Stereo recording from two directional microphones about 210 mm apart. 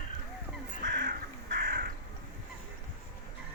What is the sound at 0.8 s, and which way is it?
Crow, 40° right (ahead or behind).